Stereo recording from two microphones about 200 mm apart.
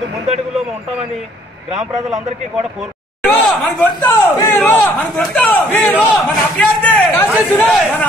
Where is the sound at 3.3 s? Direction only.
10° left (ahead or behind).